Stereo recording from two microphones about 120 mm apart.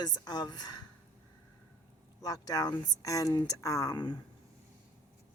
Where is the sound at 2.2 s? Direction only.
30° left (ahead or behind).